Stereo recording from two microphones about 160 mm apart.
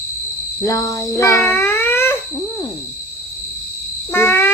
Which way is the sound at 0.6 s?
20° left (ahead or behind).